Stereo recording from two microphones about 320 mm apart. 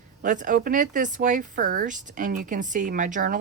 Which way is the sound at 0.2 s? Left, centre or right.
Right.